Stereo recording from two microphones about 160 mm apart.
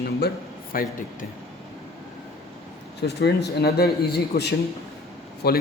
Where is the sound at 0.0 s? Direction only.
70° left (ahead or behind).